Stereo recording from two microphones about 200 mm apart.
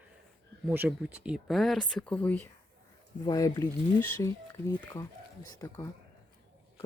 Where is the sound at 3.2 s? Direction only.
20° left (ahead or behind).